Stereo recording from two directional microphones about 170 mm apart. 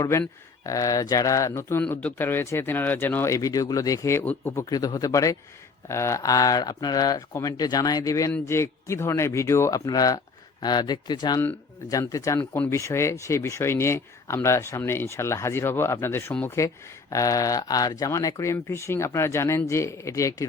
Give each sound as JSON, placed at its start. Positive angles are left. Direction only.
{"t": 0.0, "sound": "speech", "side_deg": 20}